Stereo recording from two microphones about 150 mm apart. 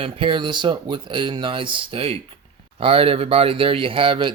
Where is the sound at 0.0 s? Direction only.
35° right (ahead or behind).